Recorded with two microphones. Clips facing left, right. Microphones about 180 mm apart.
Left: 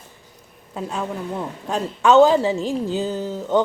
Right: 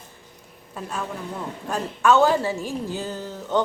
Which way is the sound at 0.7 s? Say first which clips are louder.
Left 4 dB; 20° left (ahead or behind).